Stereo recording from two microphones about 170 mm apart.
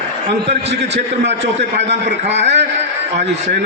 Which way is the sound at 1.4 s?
90° right.